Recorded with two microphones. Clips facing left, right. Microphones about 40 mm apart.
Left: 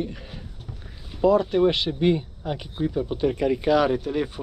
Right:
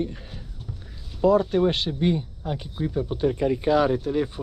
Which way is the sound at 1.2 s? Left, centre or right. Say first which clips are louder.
Left 1 dB; left.